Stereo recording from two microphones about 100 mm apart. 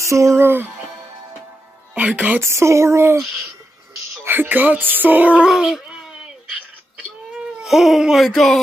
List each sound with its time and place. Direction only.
0.0 s music: 30° right (ahead or behind)
2.0 s speech: 15° right (ahead or behind)
2.4 s speech: 30° right (ahead or behind)
4.2 s speech: 20° right (ahead or behind)
7.5 s baby cry: 5° right (ahead or behind)
8.3 s speech: 5° left (ahead or behind)